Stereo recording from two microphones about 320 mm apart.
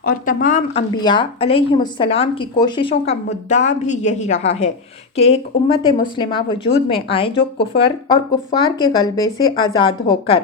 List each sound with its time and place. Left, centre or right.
0.0 s a woman's voice: left